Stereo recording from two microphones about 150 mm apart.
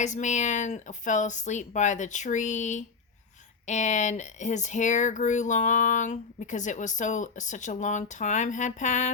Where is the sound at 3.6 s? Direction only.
50° left (ahead or behind).